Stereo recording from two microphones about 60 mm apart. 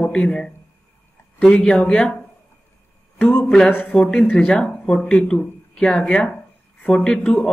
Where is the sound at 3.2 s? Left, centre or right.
Left.